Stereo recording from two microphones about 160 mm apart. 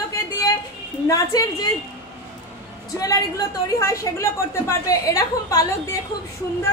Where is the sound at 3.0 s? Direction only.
20° left (ahead or behind).